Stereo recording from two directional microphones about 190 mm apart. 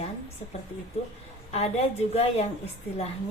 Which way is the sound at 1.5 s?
35° left (ahead or behind).